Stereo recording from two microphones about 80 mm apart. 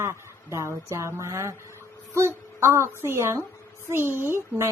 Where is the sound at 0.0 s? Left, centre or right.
Right.